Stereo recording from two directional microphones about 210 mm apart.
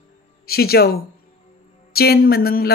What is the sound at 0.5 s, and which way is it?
Speech, 45° left (ahead or behind).